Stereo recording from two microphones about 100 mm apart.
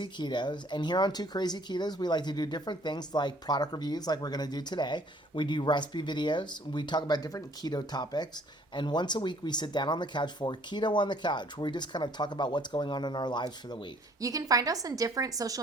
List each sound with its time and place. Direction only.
0.0 s speech: 50° left (ahead or behind)
14.2 s a woman's voice: 35° right (ahead or behind)